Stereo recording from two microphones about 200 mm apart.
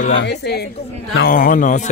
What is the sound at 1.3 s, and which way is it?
Speech, 45° left (ahead or behind).